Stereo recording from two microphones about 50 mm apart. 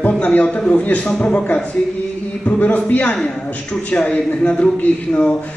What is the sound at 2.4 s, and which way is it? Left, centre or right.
A man's voice, left.